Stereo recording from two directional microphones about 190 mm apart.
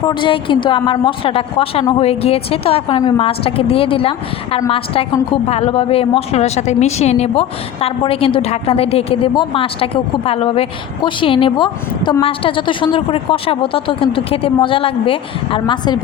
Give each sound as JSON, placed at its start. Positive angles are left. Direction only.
{"t": 0.0, "sound": "a woman's voice", "side_deg": 25}
{"t": 5.5, "sound": "a woman's voice", "side_deg": 30}